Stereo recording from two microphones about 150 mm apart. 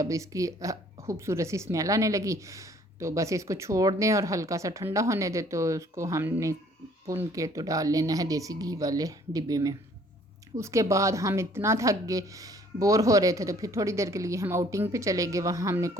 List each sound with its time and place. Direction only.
0.0 s speech: 20° right (ahead or behind)